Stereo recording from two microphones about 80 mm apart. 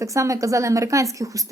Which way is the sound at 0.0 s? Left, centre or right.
Right.